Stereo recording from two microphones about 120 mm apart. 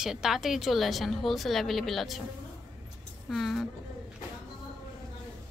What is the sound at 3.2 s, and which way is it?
Speech, centre (ahead or behind).